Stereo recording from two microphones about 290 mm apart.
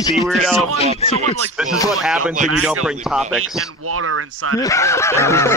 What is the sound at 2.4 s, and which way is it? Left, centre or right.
Speech, right.